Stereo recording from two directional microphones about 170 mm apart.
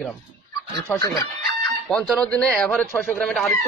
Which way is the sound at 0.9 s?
20° left (ahead or behind).